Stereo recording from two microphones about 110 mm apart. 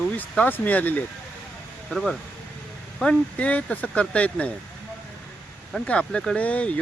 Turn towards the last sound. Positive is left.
turn(degrees=10)  # may be behind; listen again after turning